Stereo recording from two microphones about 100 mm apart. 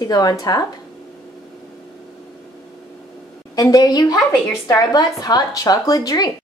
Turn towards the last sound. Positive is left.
turn(degrees=40)  # may be behind; listen again after turning